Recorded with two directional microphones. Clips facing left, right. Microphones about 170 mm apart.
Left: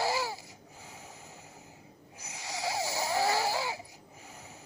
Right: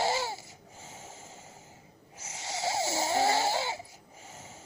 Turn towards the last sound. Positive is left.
turn(degrees=-25)  # may be behind; listen again after turning